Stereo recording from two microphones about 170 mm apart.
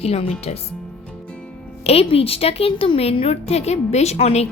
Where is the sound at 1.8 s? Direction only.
35° left (ahead or behind).